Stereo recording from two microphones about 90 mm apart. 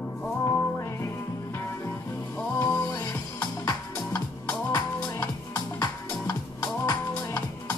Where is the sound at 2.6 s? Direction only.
25° left (ahead or behind).